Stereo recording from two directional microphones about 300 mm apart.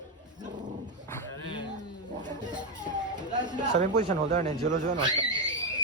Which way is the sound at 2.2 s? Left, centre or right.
Centre.